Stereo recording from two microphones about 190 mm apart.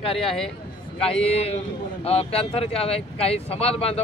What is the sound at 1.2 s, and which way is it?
Speech, 30° left (ahead or behind).